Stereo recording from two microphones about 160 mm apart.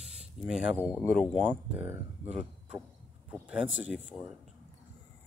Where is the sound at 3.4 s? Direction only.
10° right (ahead or behind).